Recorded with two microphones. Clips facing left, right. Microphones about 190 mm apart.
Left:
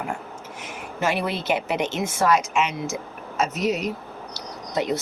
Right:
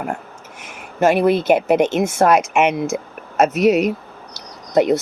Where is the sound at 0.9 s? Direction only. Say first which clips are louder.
Right 10 dB; 50° right (ahead or behind).